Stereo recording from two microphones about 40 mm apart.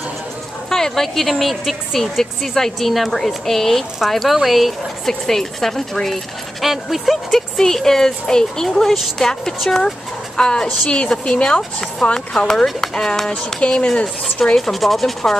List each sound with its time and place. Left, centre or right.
0.7 s speech: centre
5.2 s speech: centre
6.6 s speech: centre
7.5 s speech: centre
8.8 s speech: centre
9.2 s speech: centre
13.6 s speech: left
14.6 s speech: centre